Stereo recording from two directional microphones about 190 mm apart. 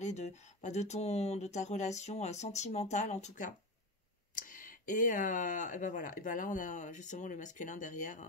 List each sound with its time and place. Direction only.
0.0 s speech: 35° left (ahead or behind)